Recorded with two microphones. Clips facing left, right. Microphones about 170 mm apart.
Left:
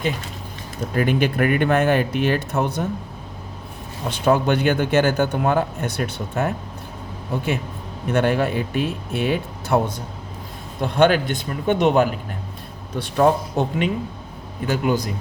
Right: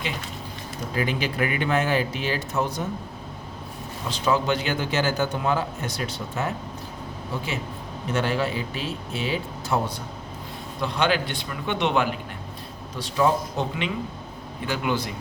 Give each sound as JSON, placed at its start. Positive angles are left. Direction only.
{"t": 0.9, "sound": "a man's voice", "side_deg": 55}
{"t": 4.1, "sound": "a man's voice", "side_deg": 55}
{"t": 8.1, "sound": "a man's voice", "side_deg": 55}
{"t": 13.0, "sound": "a man's voice", "side_deg": 55}